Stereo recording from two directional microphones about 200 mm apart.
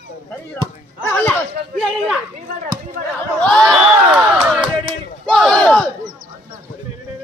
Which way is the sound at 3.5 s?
Centre (ahead or behind).